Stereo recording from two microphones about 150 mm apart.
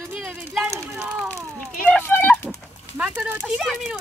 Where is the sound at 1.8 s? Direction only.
10° left (ahead or behind).